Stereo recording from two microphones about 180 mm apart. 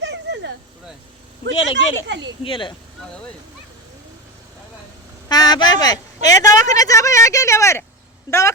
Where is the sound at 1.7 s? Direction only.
80° right.